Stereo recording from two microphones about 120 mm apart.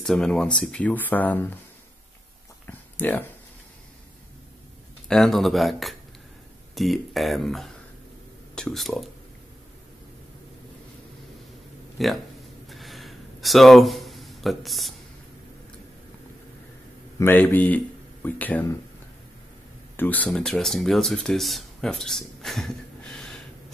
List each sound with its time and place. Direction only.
0.0 s speech: 5° left (ahead or behind)
2.6 s a sound: 15° left (ahead or behind)
5.0 s speech: 5° left (ahead or behind)
12.0 s speech: centre (ahead or behind)
12.6 s a sound: centre (ahead or behind)
17.2 s speech: 15° left (ahead or behind)
20.0 s speech: 15° left (ahead or behind)